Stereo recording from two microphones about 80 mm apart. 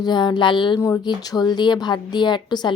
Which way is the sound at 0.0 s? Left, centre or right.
Left.